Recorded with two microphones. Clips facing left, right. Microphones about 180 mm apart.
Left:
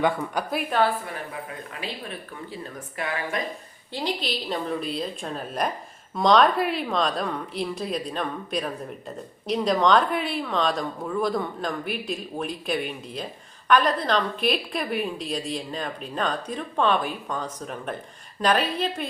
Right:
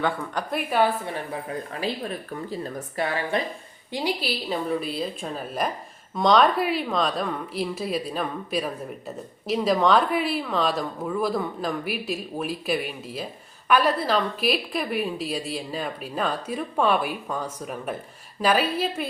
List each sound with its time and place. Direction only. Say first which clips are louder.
0.0 s a woman's voice: left 2 dB; 10° left (ahead or behind)
1.0 s speech: right 3 dB; 35° right (ahead or behind)
3.9 s a woman's voice: right 2 dB; 10° right (ahead or behind)